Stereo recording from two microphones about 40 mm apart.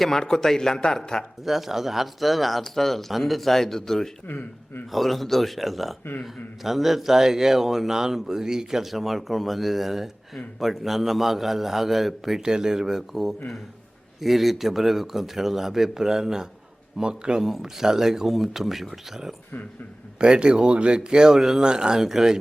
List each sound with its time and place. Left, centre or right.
0.0 s speech: centre
1.5 s speech: centre
4.3 s a man's voice: left
4.9 s speech: centre
17.0 s speech: right
17.4 s speech: centre
20.1 s speech: right
21.3 s speech: centre
21.6 s speech: centre